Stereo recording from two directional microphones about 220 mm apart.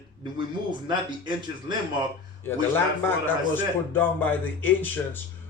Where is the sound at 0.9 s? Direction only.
20° right (ahead or behind).